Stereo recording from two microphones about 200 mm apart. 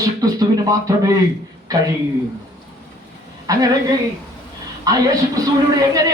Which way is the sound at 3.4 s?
15° right (ahead or behind).